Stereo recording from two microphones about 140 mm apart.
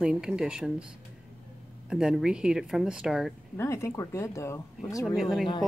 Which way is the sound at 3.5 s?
20° left (ahead or behind).